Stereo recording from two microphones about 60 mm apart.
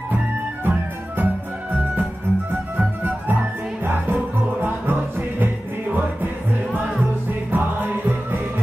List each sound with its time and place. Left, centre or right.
0.7 s music: right
3.8 s music: right
7.5 s music: right